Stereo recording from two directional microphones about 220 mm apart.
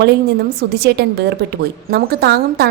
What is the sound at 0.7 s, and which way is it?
A woman's voice, 50° right (ahead or behind).